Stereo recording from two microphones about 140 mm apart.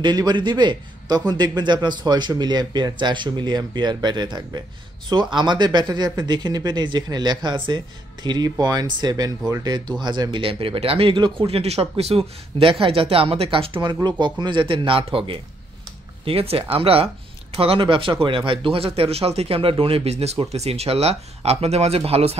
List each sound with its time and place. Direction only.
0.0 s a man's voice: 30° right (ahead or behind); by 22.4 s 45° right (ahead or behind)